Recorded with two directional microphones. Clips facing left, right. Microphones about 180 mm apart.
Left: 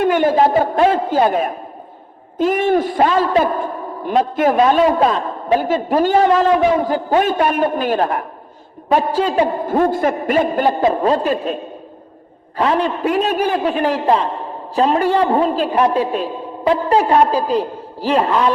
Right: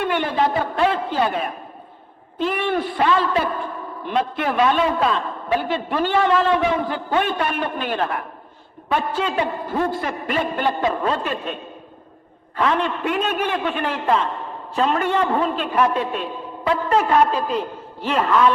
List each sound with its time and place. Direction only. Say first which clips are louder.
0.0 s a man's voice: left 7 dB; 45° left (ahead or behind)